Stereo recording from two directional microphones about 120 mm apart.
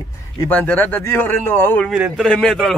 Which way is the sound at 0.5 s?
15° left (ahead or behind).